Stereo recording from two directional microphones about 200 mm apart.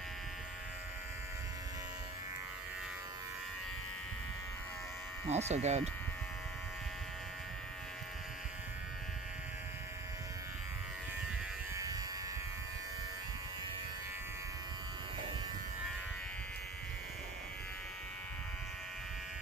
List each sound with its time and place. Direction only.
5.3 s speech: 35° right (ahead or behind)
11.7 s electric shaver: 15° right (ahead or behind)